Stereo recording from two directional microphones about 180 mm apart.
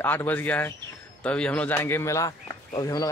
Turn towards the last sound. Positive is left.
turn(degrees=20)  # may be behind; listen again after turning